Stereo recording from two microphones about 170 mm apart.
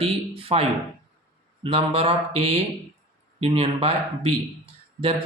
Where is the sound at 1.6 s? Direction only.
30° right (ahead or behind).